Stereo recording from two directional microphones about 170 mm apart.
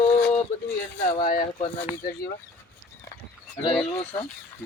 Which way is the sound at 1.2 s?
55° left (ahead or behind).